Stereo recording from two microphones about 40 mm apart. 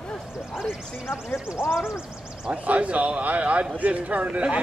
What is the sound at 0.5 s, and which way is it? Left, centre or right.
Speech, centre.